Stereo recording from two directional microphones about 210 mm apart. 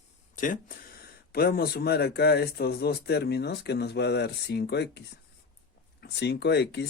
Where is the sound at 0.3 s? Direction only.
40° left (ahead or behind).